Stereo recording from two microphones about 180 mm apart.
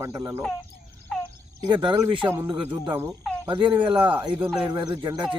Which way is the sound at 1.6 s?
25° right (ahead or behind).